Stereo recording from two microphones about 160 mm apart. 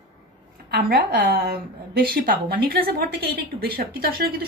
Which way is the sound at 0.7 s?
80° right.